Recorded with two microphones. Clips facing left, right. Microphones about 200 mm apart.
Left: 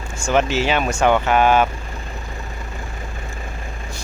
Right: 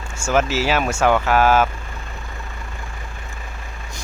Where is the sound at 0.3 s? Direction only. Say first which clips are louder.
Left 1 dB; 5° right (ahead or behind).